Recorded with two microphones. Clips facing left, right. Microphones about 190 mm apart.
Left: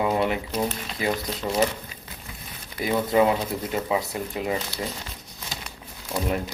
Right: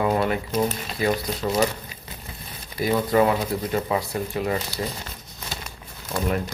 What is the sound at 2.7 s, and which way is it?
Speech, 25° left (ahead or behind).